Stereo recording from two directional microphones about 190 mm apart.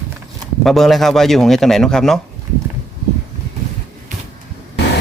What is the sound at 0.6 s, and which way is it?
A man's voice, centre (ahead or behind).